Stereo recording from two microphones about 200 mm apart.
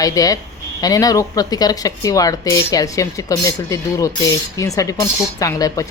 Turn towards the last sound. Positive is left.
turn(degrees=15)  # may be behind; listen again after turning